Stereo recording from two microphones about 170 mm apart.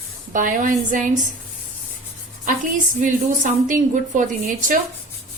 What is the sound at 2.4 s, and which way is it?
A woman's voice, 50° right (ahead or behind).